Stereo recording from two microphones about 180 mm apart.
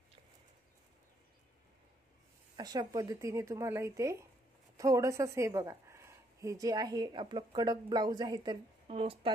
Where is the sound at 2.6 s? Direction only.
20° right (ahead or behind).